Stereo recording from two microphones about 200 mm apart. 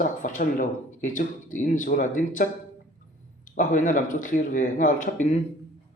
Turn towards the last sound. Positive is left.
turn(degrees=40)  # may be behind; listen again after turning